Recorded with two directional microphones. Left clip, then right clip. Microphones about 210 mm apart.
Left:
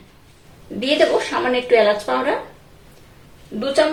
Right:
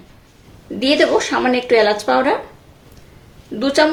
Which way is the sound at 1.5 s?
45° right (ahead or behind).